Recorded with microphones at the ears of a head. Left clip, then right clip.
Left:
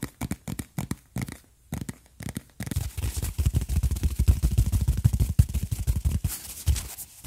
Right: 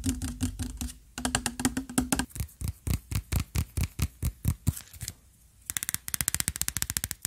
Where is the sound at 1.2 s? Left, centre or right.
Right.